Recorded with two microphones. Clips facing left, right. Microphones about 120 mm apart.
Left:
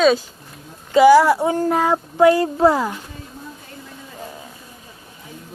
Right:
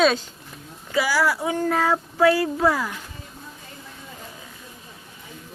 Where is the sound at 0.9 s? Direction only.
25° left (ahead or behind).